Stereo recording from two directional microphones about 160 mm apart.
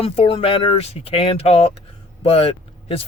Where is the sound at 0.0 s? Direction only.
35° left (ahead or behind).